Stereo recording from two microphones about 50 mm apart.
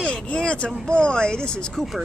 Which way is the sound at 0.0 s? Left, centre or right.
Left.